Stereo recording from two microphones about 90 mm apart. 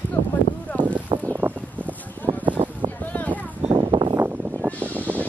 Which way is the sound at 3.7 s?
70° right (ahead or behind).